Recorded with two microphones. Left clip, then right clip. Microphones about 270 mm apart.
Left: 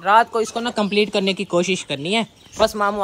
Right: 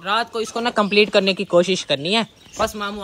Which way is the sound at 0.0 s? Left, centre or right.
Centre.